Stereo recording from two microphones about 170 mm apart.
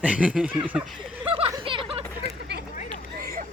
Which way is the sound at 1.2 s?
30° right (ahead or behind).